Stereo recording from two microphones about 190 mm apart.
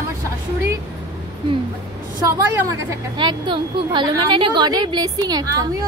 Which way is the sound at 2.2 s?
15° right (ahead or behind).